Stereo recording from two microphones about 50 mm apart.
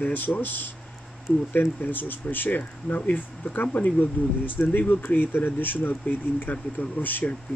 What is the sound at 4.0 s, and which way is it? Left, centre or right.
Speech, left.